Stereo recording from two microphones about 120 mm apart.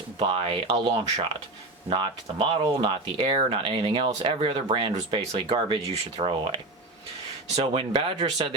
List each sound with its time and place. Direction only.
0.2 s speech: 50° right (ahead or behind)
2.4 s speech: 45° right (ahead or behind)